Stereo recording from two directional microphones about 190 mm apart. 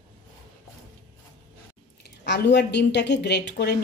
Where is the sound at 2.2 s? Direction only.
65° left (ahead or behind).